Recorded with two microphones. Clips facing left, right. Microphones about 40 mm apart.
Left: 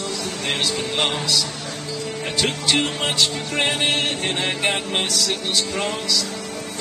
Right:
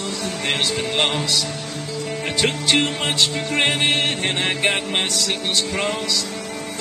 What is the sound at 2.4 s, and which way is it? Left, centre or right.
Music, right.